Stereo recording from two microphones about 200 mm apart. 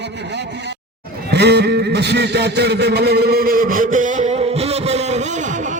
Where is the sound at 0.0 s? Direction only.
55° right (ahead or behind).